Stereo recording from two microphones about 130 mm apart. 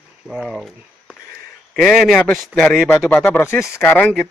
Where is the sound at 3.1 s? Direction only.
15° left (ahead or behind).